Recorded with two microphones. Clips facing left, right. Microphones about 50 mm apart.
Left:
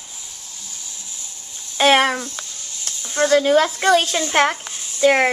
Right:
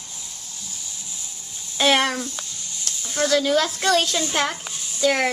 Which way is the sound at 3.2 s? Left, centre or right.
Left.